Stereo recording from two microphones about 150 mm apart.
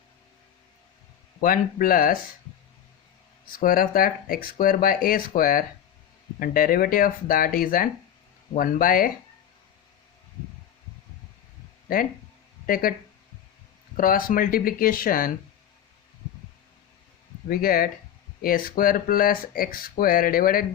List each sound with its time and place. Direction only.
1.4 s speech: 70° left (ahead or behind)
3.5 s speech: 70° left (ahead or behind)
11.9 s speech: 75° left (ahead or behind)
13.9 s speech: 70° left (ahead or behind)
17.5 s speech: 75° left (ahead or behind)